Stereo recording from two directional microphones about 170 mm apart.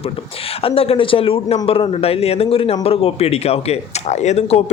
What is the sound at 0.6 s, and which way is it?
Speech, 35° left (ahead or behind).